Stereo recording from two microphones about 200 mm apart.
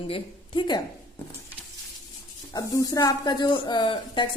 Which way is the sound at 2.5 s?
15° left (ahead or behind).